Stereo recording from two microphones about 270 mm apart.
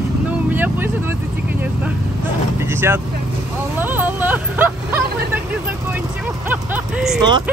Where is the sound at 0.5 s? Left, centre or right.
Centre.